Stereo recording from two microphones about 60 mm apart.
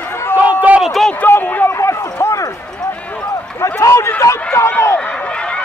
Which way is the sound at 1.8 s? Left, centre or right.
Left.